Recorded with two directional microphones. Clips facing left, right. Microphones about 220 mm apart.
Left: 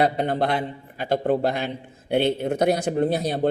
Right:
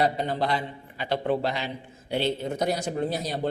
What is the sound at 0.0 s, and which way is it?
A man's voice, 60° left (ahead or behind).